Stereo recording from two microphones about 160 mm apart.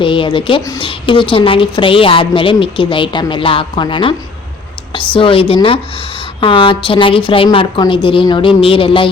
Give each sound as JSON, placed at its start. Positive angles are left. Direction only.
{"t": 0.0, "sound": "a woman's voice", "side_deg": 30}